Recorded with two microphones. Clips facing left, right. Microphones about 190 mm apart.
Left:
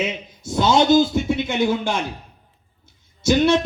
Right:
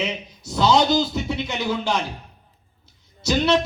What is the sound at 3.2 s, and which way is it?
Speech, 50° left (ahead or behind).